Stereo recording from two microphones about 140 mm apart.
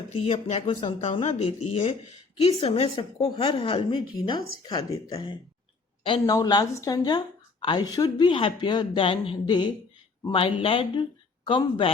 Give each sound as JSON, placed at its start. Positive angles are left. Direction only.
{"t": 0.1, "sound": "speech", "side_deg": 45}
{"t": 1.2, "sound": "a woman's voice", "side_deg": 50}